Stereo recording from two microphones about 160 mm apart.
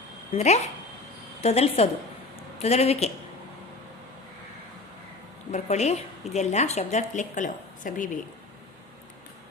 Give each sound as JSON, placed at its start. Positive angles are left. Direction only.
{"t": 0.3, "sound": "a woman's voice", "side_deg": 45}
{"t": 5.5, "sound": "a woman's voice", "side_deg": 45}